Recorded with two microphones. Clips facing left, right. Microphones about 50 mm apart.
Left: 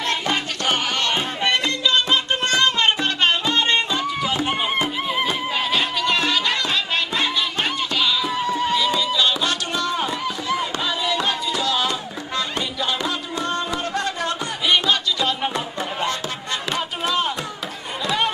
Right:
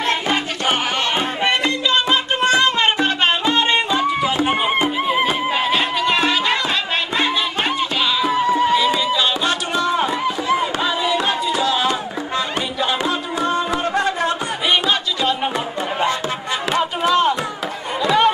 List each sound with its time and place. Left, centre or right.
0.0 s music: centre
16.7 s chop: centre
18.0 s chatter: centre